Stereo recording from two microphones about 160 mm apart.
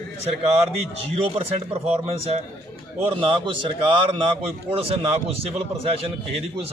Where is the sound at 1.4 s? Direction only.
35° right (ahead or behind).